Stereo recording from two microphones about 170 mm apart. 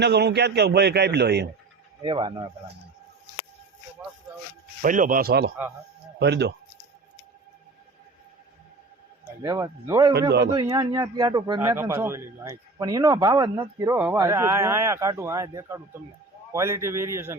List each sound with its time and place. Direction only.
0.0 s speech: 80° right
2.0 s speech: 30° right (ahead or behind)
4.8 s speech: 50° right (ahead or behind)
6.1 s speech: 80° right
9.4 s speech: 20° right (ahead or behind)
11.7 s a man's voice: 15° right (ahead or behind)